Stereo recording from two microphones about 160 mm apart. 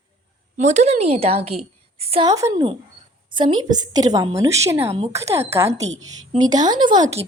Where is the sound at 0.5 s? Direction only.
50° right (ahead or behind).